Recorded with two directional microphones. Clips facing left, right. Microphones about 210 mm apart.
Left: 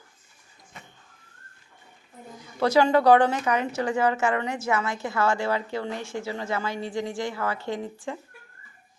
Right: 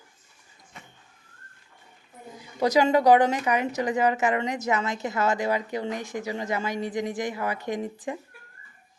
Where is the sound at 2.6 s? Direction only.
15° right (ahead or behind).